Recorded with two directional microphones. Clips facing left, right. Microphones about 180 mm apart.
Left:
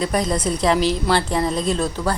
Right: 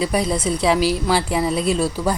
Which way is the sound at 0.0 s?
5° right (ahead or behind).